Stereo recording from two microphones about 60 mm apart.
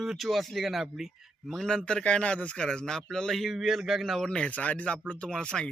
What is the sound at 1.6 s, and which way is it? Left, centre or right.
Speech, centre.